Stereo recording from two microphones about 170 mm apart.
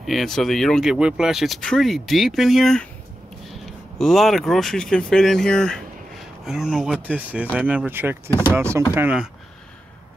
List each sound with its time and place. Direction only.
0.0 s speech: centre (ahead or behind)